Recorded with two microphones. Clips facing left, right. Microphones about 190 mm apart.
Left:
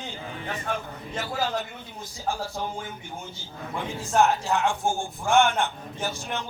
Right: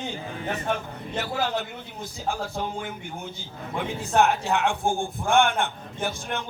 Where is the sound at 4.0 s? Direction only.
60° right (ahead or behind).